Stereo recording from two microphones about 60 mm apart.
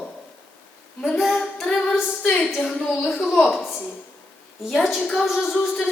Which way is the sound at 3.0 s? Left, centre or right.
Centre.